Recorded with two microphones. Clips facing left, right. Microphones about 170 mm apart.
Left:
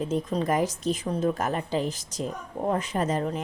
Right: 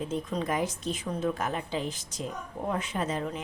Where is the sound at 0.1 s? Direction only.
40° left (ahead or behind).